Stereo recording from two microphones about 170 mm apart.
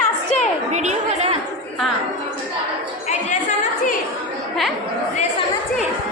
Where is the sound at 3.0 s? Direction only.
45° left (ahead or behind).